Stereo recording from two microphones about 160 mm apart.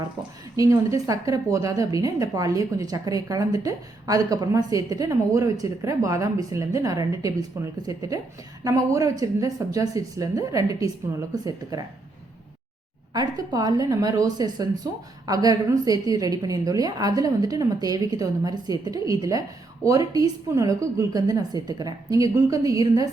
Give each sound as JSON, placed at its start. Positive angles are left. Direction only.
{"t": 0.5, "sound": "a woman's voice", "side_deg": -20}
{"t": 13.1, "sound": "a woman's voice", "side_deg": -25}